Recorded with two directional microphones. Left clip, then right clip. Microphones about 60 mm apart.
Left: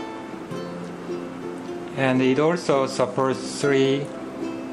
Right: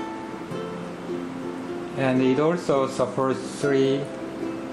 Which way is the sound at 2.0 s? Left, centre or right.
Left.